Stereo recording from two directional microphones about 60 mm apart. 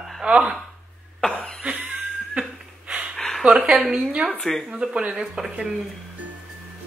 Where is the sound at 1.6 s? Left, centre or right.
Centre.